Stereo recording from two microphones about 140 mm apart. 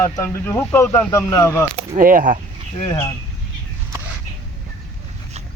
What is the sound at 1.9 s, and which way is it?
Speech, 75° right (ahead or behind).